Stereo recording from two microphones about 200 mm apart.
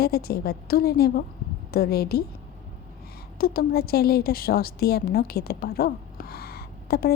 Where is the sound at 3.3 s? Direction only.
50° left (ahead or behind).